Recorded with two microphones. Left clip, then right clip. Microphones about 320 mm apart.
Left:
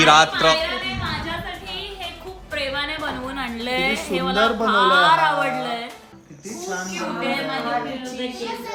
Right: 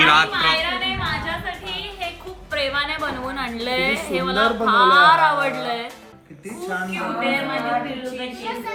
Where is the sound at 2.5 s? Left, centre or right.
Centre.